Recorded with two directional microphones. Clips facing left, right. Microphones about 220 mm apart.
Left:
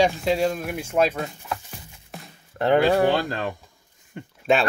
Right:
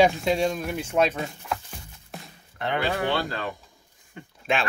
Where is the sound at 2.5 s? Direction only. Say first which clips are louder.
Left 9 dB; 40° left (ahead or behind).